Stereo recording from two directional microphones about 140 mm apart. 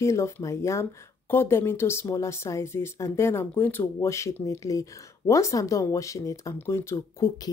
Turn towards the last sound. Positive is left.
turn(degrees=20)  # may be behind; listen again after turning